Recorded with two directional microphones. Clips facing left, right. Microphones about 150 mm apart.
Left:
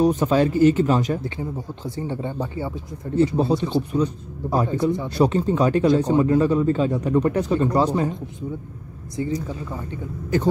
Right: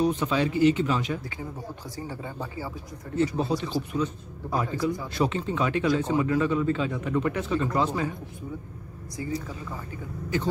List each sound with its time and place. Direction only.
0.0 s speech: 45° left (ahead or behind)
2.0 s speech: 25° left (ahead or behind)